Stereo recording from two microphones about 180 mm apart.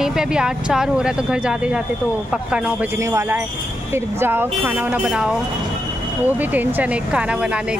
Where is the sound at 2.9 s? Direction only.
15° right (ahead or behind).